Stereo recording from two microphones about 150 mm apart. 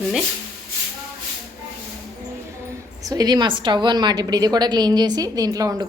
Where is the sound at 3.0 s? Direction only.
25° right (ahead or behind).